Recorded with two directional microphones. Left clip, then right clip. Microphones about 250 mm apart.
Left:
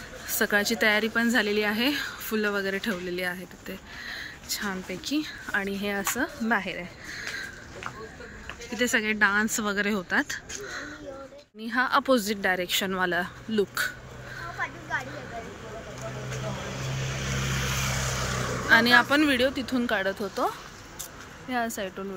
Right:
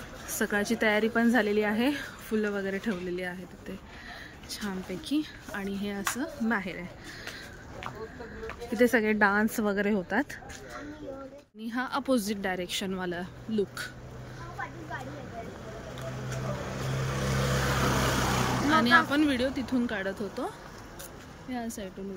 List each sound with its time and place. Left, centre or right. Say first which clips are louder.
0.4 s a woman's voice: left 4 dB; centre
8.7 s a woman's voice: right 1 dB; centre
17.1 s vehicle: right 2 dB; centre
18.7 s speech: left 4 dB; centre